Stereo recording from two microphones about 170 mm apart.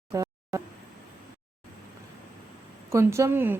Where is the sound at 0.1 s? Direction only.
20° right (ahead or behind).